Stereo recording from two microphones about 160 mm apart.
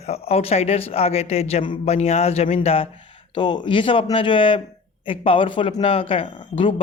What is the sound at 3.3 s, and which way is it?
Speech, 30° left (ahead or behind).